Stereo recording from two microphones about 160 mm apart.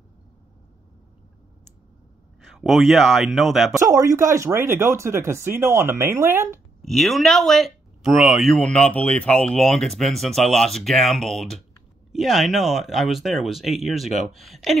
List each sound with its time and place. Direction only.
2.4 s speech: centre (ahead or behind)
3.8 s speech: 20° right (ahead or behind)
6.8 s speech: centre (ahead or behind)